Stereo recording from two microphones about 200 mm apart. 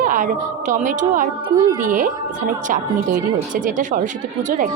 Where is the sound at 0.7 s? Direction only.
40° right (ahead or behind).